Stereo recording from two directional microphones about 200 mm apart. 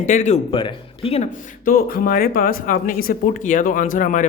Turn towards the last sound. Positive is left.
turn(degrees=40)  # may be behind; listen again after turning